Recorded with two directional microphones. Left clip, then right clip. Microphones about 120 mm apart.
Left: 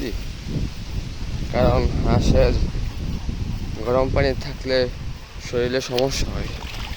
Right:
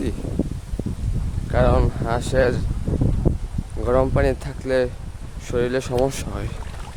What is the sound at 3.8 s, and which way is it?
Speech, 25° right (ahead or behind).